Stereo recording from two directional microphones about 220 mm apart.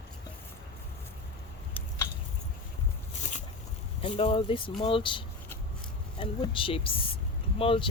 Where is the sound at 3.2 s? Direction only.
35° left (ahead or behind).